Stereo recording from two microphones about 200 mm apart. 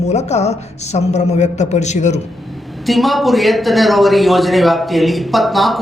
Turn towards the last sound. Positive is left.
turn(degrees=0)  # may be behind; listen again after turning